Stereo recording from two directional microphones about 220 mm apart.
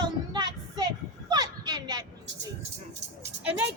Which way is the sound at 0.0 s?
20° right (ahead or behind).